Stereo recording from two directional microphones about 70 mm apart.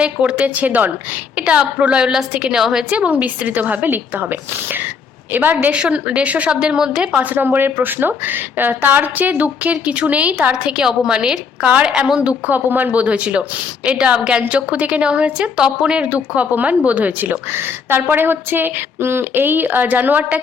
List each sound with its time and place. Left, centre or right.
0.0 s a woman's voice: centre
2.9 s a woman's voice: centre
5.7 s a woman's voice: centre
7.2 s a woman's voice: right